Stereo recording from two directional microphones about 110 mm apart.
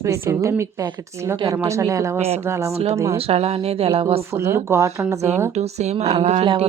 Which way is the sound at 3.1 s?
65° right (ahead or behind).